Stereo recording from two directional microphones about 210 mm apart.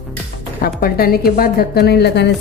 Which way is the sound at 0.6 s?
45° left (ahead or behind).